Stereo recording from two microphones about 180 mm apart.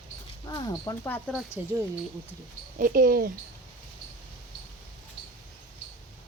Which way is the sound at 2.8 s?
50° right (ahead or behind).